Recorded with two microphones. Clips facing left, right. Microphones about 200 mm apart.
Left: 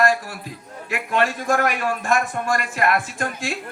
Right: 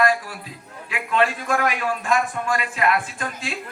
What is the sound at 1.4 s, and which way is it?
A man's voice, 45° left (ahead or behind).